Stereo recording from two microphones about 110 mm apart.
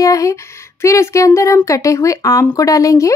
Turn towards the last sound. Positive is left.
turn(degrees=30)  # may be behind; listen again after turning